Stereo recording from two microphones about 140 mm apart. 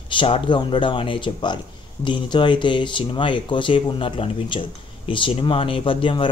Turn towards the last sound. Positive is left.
turn(degrees=35)  # may be behind; listen again after turning